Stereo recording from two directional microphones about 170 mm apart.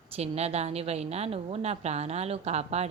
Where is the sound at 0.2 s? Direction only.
40° right (ahead or behind).